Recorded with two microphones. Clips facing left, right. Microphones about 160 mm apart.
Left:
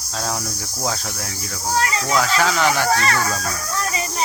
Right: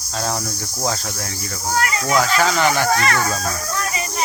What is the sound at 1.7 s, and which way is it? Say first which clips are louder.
Speech: even; 25° left (ahead or behind).